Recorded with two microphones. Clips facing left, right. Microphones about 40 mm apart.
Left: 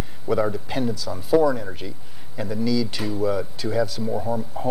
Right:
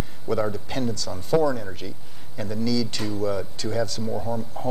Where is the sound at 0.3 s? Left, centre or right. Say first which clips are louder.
Left 3 dB; centre.